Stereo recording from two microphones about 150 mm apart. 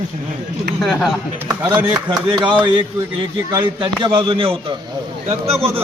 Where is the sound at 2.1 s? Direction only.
30° right (ahead or behind).